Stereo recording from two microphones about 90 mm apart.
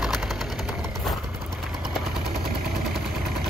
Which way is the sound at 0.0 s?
Centre (ahead or behind).